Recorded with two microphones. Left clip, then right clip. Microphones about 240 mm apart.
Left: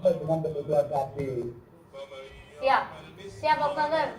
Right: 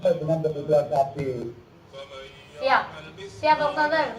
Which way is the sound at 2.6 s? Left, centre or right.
Right.